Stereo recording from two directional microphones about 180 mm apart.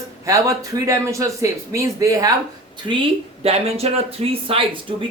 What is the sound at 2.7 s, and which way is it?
Speech, 30° right (ahead or behind).